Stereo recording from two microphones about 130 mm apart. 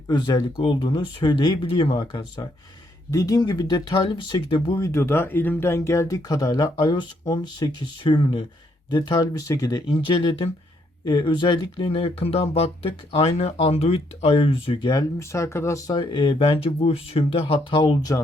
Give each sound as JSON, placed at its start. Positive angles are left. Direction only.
{"t": 0.1, "sound": "speech", "side_deg": 35}
{"t": 4.8, "sound": "speech", "side_deg": 20}
{"t": 15.2, "sound": "speech", "side_deg": 20}
{"t": 16.0, "sound": "speech", "side_deg": 35}